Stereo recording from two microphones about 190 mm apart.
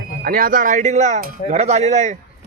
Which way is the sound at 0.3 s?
50° right (ahead or behind).